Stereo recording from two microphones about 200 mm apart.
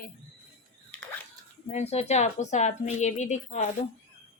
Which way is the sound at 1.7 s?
30° left (ahead or behind).